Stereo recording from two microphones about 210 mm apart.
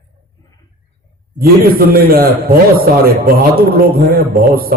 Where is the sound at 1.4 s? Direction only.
45° right (ahead or behind).